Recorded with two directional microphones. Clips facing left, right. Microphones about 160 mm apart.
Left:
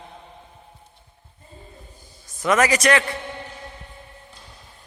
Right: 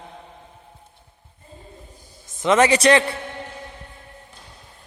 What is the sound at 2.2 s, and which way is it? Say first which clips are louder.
Speech: right 3 dB; 25° right (ahead or behind).